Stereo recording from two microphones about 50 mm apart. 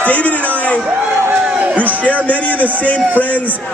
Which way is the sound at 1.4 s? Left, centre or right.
Right.